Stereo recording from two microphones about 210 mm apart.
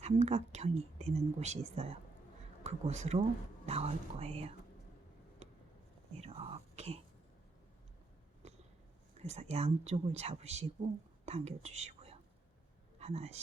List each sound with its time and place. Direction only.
0.0 s speech: 30° right (ahead or behind)
5.4 s a sound: 30° right (ahead or behind)
6.1 s whispering: 30° right (ahead or behind)
9.2 s speech: 30° right (ahead or behind)